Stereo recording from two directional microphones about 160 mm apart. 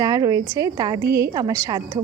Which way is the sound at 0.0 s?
25° right (ahead or behind).